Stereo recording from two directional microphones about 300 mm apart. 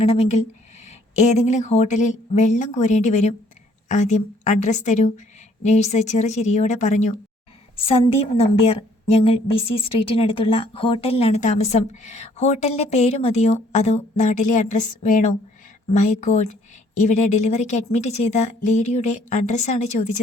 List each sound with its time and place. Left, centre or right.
0.0 s speech: left